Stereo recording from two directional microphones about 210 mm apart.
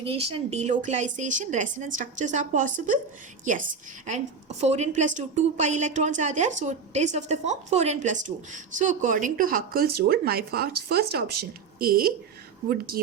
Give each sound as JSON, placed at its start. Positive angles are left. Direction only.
{"t": 0.0, "sound": "a woman's voice", "side_deg": -25}
{"t": 4.0, "sound": "a woman's voice", "side_deg": -35}